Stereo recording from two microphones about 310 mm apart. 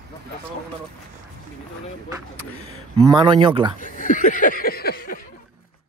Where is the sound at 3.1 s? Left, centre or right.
Centre.